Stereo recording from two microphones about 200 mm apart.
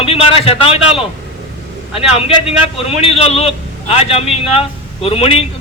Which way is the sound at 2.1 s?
30° left (ahead or behind).